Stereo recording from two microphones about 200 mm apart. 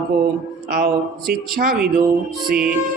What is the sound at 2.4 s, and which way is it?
Mantra, 5° right (ahead or behind).